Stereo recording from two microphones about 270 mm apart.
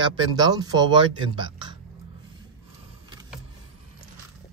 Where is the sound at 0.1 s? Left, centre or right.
Centre.